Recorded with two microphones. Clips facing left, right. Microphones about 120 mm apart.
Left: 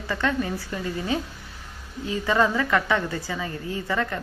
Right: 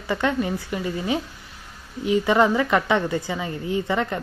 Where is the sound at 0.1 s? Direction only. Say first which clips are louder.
Right 3 dB; 20° right (ahead or behind).